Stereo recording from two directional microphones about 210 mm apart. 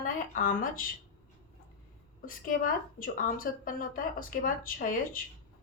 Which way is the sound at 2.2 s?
40° left (ahead or behind).